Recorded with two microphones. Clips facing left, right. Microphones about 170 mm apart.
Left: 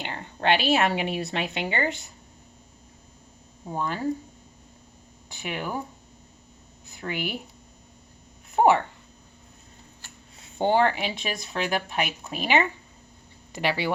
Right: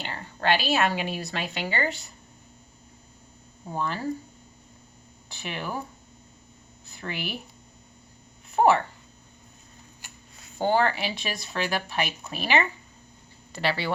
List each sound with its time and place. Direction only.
0.0 s speech: 20° left (ahead or behind)
3.7 s speech: 15° left (ahead or behind)
5.3 s speech: 15° left (ahead or behind)
6.8 s speech: 15° left (ahead or behind)
10.6 s speech: 20° left (ahead or behind)